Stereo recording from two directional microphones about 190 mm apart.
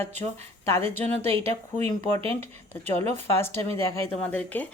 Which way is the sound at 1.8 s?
35° right (ahead or behind).